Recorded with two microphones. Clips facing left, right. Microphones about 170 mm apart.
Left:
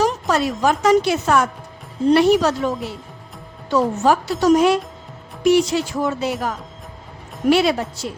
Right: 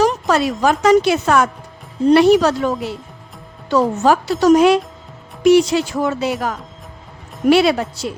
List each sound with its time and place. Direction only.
0.0 s a woman's voice: 85° right
2.1 s a woman's voice: 75° right (ahead or behind)
3.7 s speech: 90° right
7.5 s a woman's voice: 75° right (ahead or behind)